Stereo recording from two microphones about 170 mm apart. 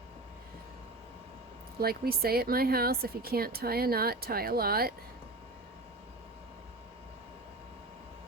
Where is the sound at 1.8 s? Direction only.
65° right (ahead or behind).